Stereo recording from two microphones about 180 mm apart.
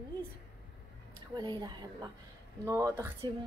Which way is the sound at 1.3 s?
25° right (ahead or behind).